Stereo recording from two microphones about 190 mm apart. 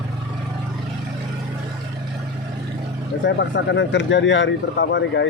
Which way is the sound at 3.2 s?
70° left (ahead or behind).